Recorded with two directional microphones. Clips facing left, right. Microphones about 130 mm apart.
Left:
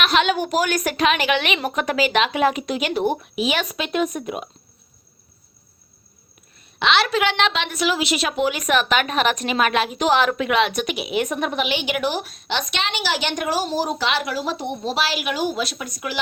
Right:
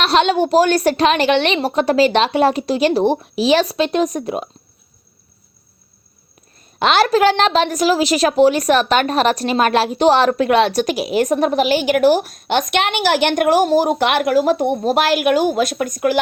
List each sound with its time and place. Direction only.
0.0 s a woman's voice: 35° right (ahead or behind)
6.7 s a woman's voice: 45° right (ahead or behind)